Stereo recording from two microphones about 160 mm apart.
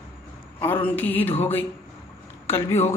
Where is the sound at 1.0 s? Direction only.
10° left (ahead or behind).